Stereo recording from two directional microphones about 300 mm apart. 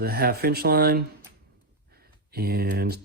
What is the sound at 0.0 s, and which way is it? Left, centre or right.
Speech, right.